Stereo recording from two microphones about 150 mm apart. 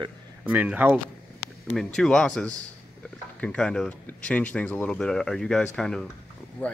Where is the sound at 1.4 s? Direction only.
Centre (ahead or behind).